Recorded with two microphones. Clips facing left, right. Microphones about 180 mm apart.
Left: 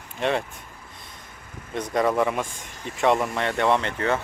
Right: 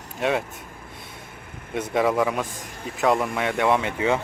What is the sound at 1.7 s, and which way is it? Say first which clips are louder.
Speech: right 1 dB; 5° right (ahead or behind).